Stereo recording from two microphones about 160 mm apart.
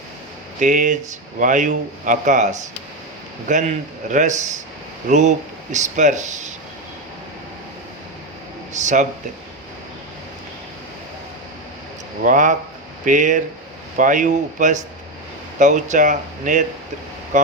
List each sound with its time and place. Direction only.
0.6 s speech: 50° right (ahead or behind)
8.7 s speech: 50° right (ahead or behind)
12.2 s speech: 55° right (ahead or behind)